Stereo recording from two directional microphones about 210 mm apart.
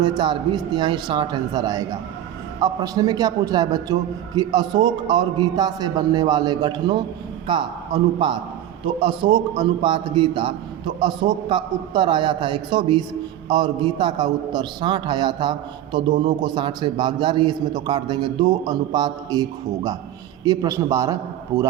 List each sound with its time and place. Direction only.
0.0 s a man's voice: 20° right (ahead or behind)